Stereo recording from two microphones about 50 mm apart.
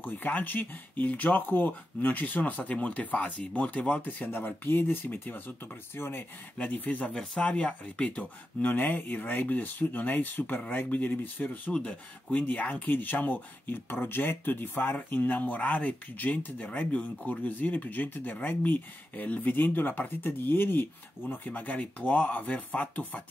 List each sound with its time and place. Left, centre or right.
0.0 s speech: left
4.0 s speech: left
5.0 s speech: left
7.4 s speech: left
11.7 s speech: left
12.4 s speech: left